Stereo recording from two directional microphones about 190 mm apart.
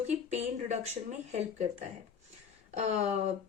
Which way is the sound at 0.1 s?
35° right (ahead or behind).